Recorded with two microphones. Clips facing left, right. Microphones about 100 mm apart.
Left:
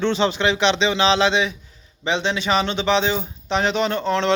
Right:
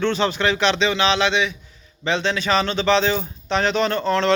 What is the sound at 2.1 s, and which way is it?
Speech, 20° left (ahead or behind).